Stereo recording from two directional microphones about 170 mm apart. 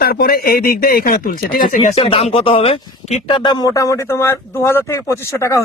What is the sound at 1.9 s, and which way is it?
Speech, 35° left (ahead or behind).